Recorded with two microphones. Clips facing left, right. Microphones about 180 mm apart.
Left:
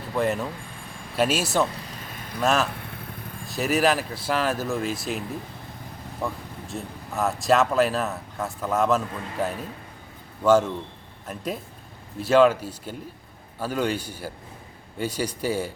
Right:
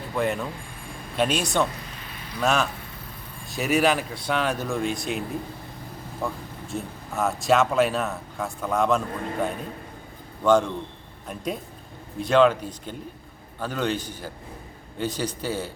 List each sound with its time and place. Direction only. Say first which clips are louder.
0.1 s speech: left 1 dB; centre (ahead or behind)
2.7 s vehicle: left 2 dB; 60° left (ahead or behind)
3.4 s speech: even; centre (ahead or behind)
6.2 s speech: even; centre (ahead or behind)